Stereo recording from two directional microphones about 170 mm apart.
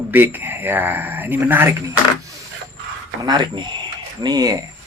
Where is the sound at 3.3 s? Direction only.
25° right (ahead or behind).